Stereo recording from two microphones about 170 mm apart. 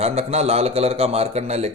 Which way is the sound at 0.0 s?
40° right (ahead or behind).